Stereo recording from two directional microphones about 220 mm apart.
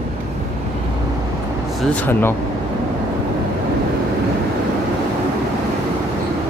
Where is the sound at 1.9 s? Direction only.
10° left (ahead or behind).